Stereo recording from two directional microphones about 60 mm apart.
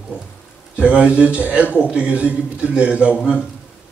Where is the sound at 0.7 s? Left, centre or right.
Centre.